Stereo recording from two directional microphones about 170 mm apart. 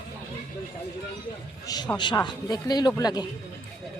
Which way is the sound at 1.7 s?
25° left (ahead or behind).